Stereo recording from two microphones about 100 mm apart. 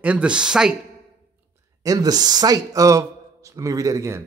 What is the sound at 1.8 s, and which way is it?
Speech, 40° right (ahead or behind).